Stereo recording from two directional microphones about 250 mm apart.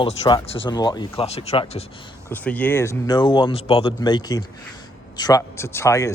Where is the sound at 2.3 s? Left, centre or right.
Centre.